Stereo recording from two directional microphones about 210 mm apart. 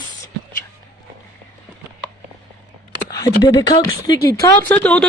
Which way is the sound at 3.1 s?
15° left (ahead or behind).